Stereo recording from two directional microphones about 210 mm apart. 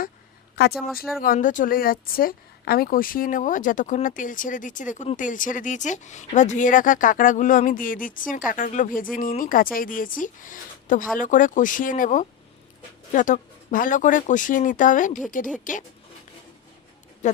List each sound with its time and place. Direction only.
0.6 s speech: 50° left (ahead or behind)
17.2 s speech: 35° left (ahead or behind)